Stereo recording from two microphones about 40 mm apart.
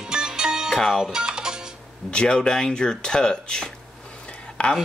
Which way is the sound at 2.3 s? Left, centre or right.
Centre.